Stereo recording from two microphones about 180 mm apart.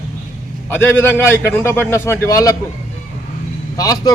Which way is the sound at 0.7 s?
10° left (ahead or behind).